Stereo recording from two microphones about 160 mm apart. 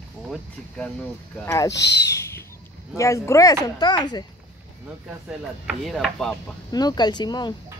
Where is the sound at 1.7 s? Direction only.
90° left.